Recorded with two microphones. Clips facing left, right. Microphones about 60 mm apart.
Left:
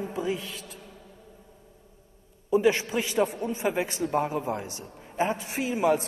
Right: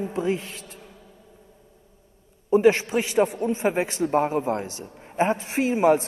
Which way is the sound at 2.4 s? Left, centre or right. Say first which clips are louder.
Right 5 dB; right.